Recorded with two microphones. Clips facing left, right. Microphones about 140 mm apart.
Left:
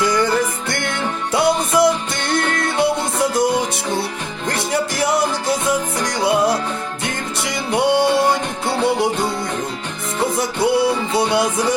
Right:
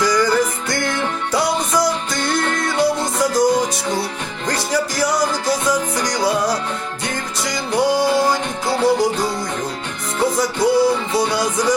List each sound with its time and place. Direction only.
0.0 s music: 25° left (ahead or behind)
4.4 s music: 25° left (ahead or behind)
10.3 s music: 25° left (ahead or behind)